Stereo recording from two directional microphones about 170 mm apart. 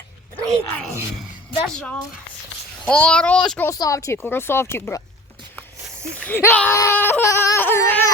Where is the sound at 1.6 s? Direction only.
5° left (ahead or behind).